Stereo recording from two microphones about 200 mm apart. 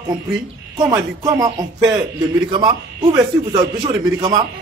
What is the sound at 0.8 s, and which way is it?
A man's voice, 20° right (ahead or behind).